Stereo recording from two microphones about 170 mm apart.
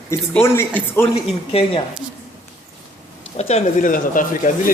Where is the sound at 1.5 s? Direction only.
35° left (ahead or behind).